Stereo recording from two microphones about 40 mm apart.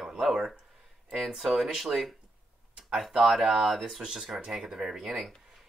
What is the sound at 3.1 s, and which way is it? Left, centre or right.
Speech, centre.